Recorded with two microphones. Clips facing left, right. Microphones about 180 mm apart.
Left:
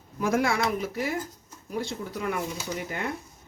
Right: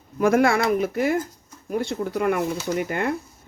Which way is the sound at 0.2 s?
60° right (ahead or behind).